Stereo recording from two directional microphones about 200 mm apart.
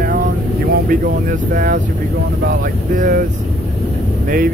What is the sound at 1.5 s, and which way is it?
Speech, 40° right (ahead or behind).